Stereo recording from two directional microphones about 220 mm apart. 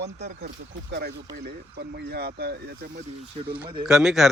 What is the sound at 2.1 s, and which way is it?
Speech, 45° right (ahead or behind).